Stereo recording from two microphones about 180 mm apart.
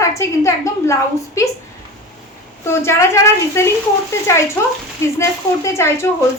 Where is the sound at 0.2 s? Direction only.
15° left (ahead or behind).